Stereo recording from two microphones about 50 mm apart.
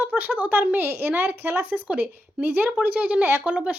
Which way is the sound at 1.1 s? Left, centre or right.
Right.